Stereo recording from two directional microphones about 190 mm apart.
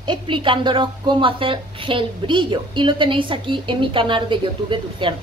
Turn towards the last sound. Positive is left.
turn(degrees=-25)  # may be behind; listen again after turning